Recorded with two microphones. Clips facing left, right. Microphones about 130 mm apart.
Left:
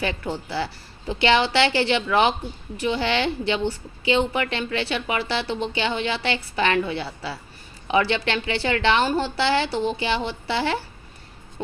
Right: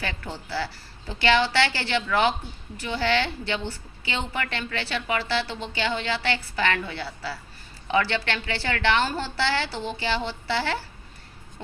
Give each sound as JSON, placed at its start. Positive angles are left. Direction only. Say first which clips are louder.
{"t": 0.0, "sound": "a woman's voice", "louder": "left 6 dB", "side_deg": 15}